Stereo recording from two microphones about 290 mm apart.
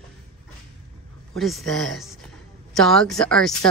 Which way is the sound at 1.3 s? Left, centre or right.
Centre.